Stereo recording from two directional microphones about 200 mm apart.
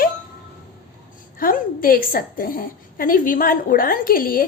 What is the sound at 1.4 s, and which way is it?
A woman's voice, 45° left (ahead or behind).